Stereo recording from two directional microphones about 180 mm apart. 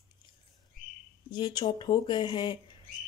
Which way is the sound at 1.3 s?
25° left (ahead or behind).